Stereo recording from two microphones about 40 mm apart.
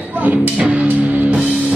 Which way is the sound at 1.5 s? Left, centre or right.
Right.